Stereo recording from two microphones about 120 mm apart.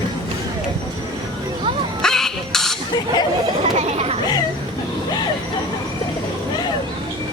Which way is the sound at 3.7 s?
60° right (ahead or behind).